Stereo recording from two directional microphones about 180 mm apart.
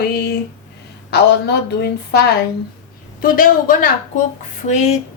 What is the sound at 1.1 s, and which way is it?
Speech, 65° left (ahead or behind).